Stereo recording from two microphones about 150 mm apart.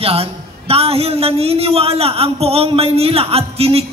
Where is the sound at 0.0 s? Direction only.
40° right (ahead or behind).